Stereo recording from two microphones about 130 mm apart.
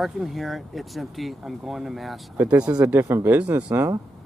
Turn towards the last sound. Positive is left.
turn(degrees=-15)  # may be behind; listen again after turning